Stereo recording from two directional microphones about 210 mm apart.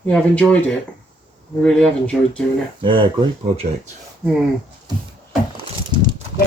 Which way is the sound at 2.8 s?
25° right (ahead or behind).